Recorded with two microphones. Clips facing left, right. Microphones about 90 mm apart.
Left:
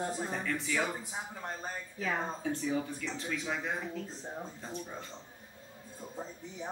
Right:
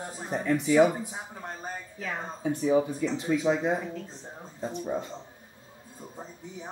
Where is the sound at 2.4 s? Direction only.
15° right (ahead or behind).